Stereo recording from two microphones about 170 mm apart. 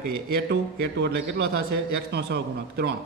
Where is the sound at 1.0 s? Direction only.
90° right.